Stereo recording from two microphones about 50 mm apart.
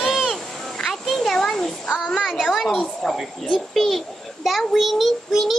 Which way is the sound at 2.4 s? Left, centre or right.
Centre.